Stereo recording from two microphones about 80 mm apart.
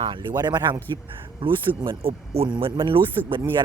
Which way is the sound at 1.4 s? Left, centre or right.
Right.